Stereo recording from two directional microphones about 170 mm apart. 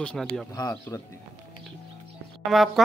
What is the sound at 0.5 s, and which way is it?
Speech, 20° left (ahead or behind).